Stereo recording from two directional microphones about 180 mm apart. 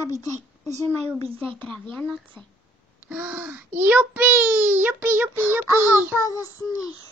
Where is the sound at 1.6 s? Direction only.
5° left (ahead or behind).